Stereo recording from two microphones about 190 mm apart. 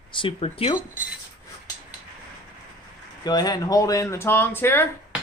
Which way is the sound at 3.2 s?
20° left (ahead or behind).